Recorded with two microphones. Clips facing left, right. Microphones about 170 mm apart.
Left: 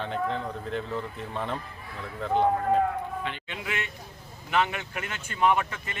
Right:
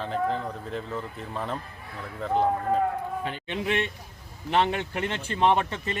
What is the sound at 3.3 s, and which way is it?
Speech, 40° right (ahead or behind).